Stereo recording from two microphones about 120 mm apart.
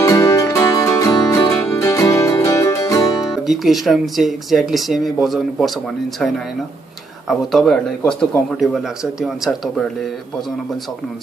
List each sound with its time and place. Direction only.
0.0 s music: 20° left (ahead or behind)
3.4 s speech: centre (ahead or behind)